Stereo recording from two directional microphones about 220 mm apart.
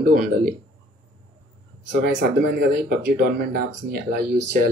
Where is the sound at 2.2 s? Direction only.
45° right (ahead or behind).